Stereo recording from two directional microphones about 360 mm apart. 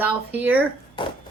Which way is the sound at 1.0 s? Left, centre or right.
Centre.